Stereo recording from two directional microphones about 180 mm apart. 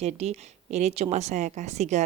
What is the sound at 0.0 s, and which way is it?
A woman's voice, 35° right (ahead or behind).